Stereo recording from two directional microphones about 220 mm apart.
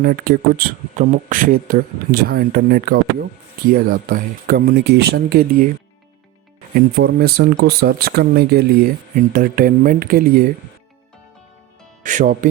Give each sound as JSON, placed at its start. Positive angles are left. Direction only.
{"t": 0.0, "sound": "speech", "side_deg": -45}
{"t": 6.7, "sound": "speech", "side_deg": -45}
{"t": 12.0, "sound": "speech", "side_deg": -35}